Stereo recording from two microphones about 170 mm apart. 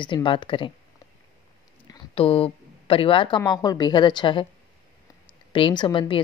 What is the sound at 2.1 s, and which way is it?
Speech, 35° left (ahead or behind).